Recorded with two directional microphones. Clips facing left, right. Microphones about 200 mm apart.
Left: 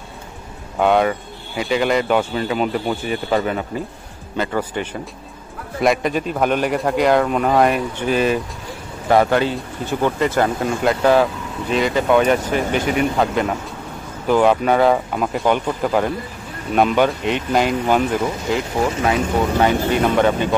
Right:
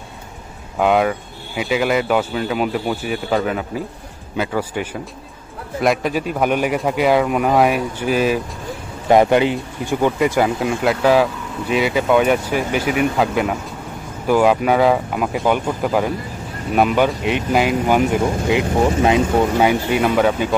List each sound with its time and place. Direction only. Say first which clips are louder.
0.7 s a man's voice: even; 5° right (ahead or behind)
9.1 s a man's voice: right 2 dB; 20° right (ahead or behind)
19.6 s a man's voice: even; 10° right (ahead or behind)